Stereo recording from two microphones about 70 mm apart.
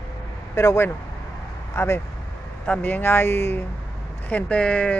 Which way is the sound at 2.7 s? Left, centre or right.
Left.